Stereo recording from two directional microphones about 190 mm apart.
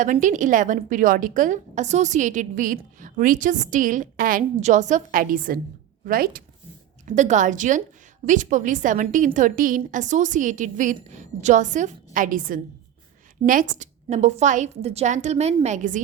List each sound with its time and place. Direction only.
0.0 s a woman's voice: 40° right (ahead or behind)